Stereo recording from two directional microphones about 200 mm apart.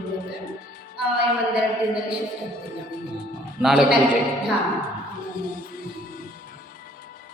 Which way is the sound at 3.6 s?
5° right (ahead or behind).